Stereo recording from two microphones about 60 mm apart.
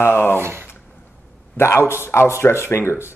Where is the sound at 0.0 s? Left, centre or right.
Left.